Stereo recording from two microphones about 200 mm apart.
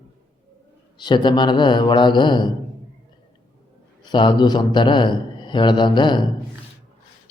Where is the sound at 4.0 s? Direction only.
20° left (ahead or behind).